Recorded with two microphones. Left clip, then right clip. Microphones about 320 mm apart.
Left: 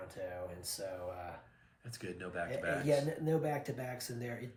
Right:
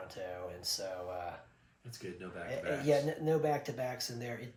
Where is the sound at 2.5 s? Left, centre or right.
Right.